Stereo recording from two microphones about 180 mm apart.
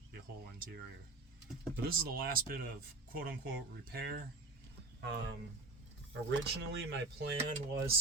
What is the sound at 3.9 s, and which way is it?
Speech, 60° right (ahead or behind).